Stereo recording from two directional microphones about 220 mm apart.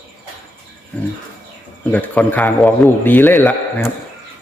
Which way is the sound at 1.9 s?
5° left (ahead or behind).